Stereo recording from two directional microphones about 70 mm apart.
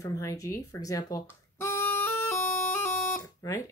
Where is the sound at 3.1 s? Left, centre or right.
Left.